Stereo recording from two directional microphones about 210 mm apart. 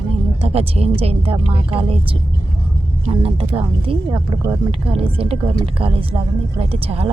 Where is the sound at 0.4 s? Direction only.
30° right (ahead or behind).